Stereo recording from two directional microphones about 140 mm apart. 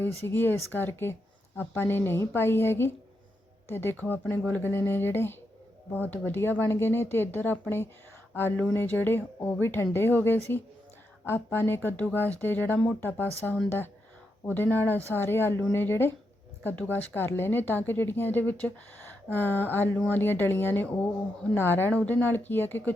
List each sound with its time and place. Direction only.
0.2 s speech: 15° left (ahead or behind)
11.5 s speech: 15° left (ahead or behind)